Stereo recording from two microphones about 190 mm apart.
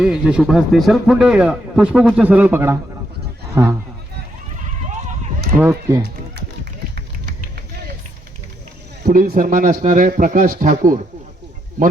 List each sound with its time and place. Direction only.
0.0 s a man's voice: 5° right (ahead or behind)
5.5 s speech: 15° right (ahead or behind)
9.0 s speech: 50° right (ahead or behind)